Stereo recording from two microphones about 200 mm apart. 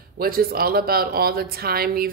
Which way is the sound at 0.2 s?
50° right (ahead or behind).